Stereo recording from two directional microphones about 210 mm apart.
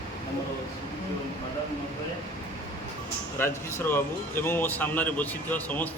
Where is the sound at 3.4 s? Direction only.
10° left (ahead or behind).